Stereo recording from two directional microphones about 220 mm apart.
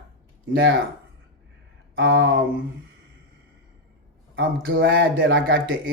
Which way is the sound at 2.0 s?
60° right (ahead or behind).